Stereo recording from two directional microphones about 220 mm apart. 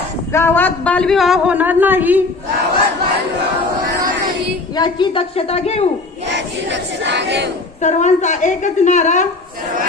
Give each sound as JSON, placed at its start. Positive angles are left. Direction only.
{"t": 0.3, "sound": "a man's voice", "side_deg": 10}
{"t": 4.8, "sound": "speech", "side_deg": 20}
{"t": 6.2, "sound": "battle cry", "side_deg": -55}
{"t": 7.8, "sound": "a woman's voice", "side_deg": 35}